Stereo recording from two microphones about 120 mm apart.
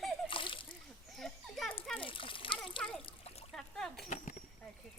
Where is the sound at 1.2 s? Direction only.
Centre (ahead or behind).